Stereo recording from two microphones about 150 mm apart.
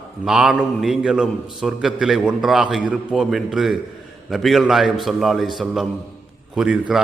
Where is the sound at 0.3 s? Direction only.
5° right (ahead or behind).